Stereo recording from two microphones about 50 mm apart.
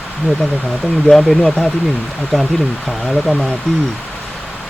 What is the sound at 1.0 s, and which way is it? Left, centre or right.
Speech, centre.